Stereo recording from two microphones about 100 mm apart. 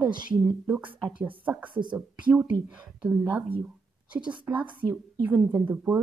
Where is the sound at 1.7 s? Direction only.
50° right (ahead or behind).